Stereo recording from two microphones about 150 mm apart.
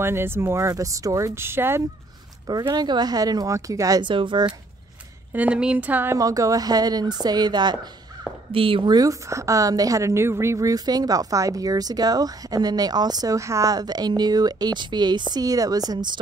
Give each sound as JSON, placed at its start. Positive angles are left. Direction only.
{"t": 0.0, "sound": "speech", "side_deg": -15}
{"t": 2.7, "sound": "a woman's voice", "side_deg": -30}
{"t": 5.3, "sound": "speech", "side_deg": -10}
{"t": 6.1, "sound": "a woman's voice", "side_deg": -25}